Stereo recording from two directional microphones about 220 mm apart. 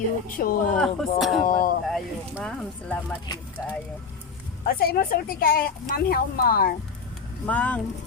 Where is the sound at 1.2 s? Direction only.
Centre (ahead or behind).